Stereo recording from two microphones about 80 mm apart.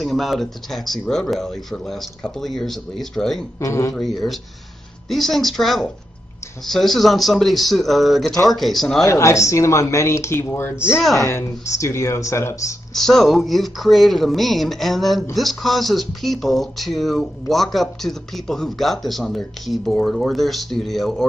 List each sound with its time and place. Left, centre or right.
0.0 s speech: centre
3.5 s speech: left
5.1 s speech: centre
9.0 s speech: left
12.9 s speech: centre